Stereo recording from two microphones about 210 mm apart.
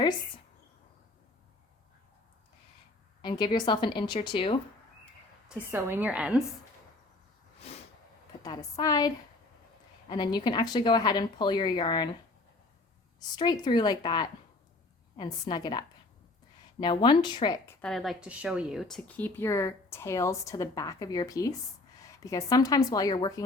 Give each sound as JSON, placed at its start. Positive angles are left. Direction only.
{"t": 3.2, "sound": "a woman's voice", "side_deg": 20}
{"t": 5.5, "sound": "a woman's voice", "side_deg": -10}
{"t": 8.4, "sound": "a woman's voice", "side_deg": 15}
{"t": 13.1, "sound": "a woman's voice", "side_deg": 20}
{"t": 16.8, "sound": "a woman's voice", "side_deg": 20}
{"t": 17.7, "sound": "speech", "side_deg": 5}